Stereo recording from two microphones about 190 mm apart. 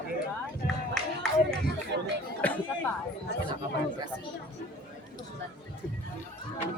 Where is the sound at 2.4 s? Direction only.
10° left (ahead or behind).